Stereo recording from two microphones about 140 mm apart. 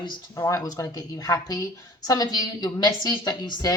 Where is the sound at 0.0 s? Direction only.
25° left (ahead or behind).